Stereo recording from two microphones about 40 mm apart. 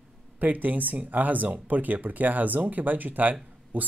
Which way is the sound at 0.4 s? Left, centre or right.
Right.